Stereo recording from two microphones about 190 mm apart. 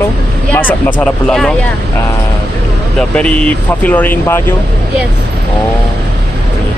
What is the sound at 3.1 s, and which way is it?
Speech, 5° left (ahead or behind).